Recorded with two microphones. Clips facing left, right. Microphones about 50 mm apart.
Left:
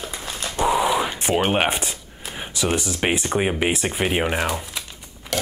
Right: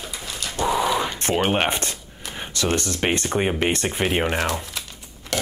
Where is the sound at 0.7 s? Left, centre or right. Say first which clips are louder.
Left 1 dB; centre.